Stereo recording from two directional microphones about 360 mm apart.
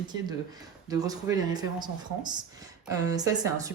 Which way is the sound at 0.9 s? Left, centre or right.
Centre.